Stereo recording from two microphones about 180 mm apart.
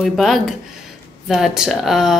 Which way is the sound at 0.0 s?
Centre (ahead or behind).